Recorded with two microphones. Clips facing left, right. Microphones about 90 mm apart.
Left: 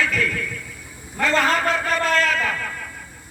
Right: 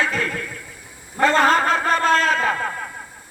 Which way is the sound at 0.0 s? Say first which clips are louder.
Even; 30° right (ahead or behind).